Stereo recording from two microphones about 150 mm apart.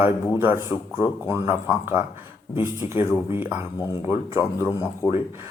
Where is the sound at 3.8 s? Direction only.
30° left (ahead or behind).